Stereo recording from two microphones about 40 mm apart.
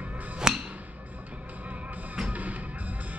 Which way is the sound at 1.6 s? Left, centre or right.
Right.